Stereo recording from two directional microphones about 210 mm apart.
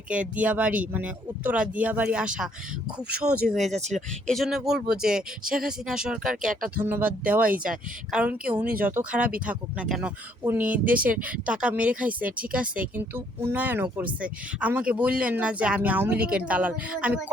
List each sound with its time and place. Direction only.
0.1 s speech: 5° right (ahead or behind)
3.8 s speech: 35° right (ahead or behind)
4.3 s speech: centre (ahead or behind)
6.4 s speech: 40° right (ahead or behind)
6.8 s speech: 10° right (ahead or behind)
10.7 s speech: 40° right (ahead or behind)
11.4 s speech: 5° right (ahead or behind)